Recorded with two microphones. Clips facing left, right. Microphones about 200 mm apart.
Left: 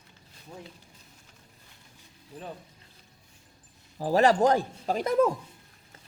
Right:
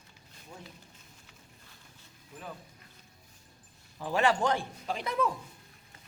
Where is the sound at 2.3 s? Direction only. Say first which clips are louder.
Left 5 dB; 35° left (ahead or behind).